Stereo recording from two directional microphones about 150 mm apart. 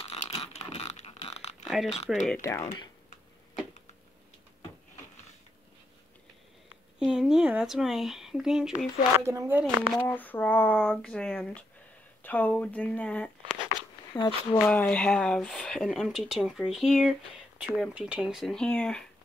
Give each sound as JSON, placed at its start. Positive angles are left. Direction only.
{"t": 0.0, "sound": "a sound", "side_deg": 40}
{"t": 1.7, "sound": "speech", "side_deg": 0}
{"t": 2.4, "sound": "speech", "side_deg": 20}
{"t": 7.0, "sound": "speech", "side_deg": -5}
{"t": 9.1, "sound": "speech", "side_deg": -20}
{"t": 9.9, "sound": "speech", "side_deg": 15}
{"t": 14.1, "sound": "speech", "side_deg": 30}
{"t": 14.6, "sound": "speech", "side_deg": 10}